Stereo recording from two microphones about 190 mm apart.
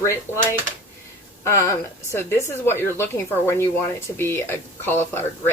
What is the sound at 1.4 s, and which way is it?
Speech, 15° left (ahead or behind).